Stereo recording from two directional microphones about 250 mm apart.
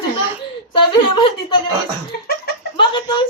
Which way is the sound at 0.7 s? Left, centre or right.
Centre.